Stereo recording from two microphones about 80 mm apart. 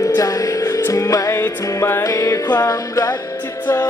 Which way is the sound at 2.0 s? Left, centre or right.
Left.